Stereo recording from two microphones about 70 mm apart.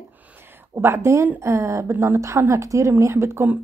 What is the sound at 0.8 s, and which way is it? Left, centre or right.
A woman's voice, right.